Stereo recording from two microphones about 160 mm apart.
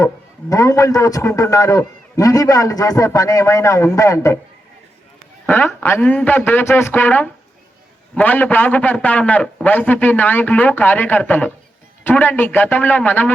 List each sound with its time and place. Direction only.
0.5 s a man's voice: 20° left (ahead or behind)
5.5 s a man's voice: 10° left (ahead or behind)